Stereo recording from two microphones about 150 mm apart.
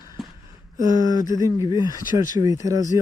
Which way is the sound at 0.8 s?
25° right (ahead or behind).